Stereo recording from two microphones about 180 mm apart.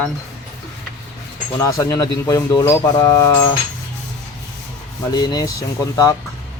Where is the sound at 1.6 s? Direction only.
15° left (ahead or behind).